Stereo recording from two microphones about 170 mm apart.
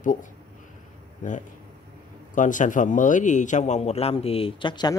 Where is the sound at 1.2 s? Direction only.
45° left (ahead or behind); by 5.0 s 25° left (ahead or behind).